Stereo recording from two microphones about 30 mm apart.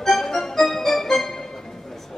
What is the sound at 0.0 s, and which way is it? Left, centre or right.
Music, centre.